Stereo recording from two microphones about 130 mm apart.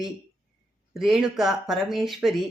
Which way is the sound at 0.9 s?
Centre (ahead or behind).